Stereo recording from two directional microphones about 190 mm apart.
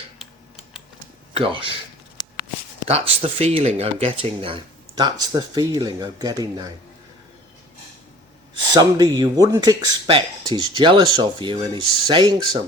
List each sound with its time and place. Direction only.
0.2 s typing: centre (ahead or behind)
1.3 s speech: 30° right (ahead or behind)
2.1 s shuffling cards: 20° left (ahead or behind)
3.2 s speech: 30° right (ahead or behind)
8.7 s speech: 20° right (ahead or behind)